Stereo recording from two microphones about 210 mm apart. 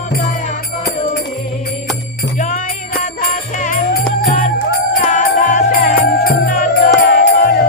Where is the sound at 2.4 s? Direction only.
40° left (ahead or behind).